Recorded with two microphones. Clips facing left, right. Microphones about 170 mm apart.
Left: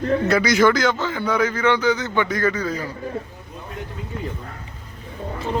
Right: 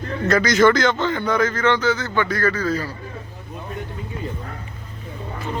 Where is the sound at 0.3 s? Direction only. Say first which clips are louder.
Right 3 dB; 10° left (ahead or behind).